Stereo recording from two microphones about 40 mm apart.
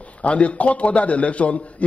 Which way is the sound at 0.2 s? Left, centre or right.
Left.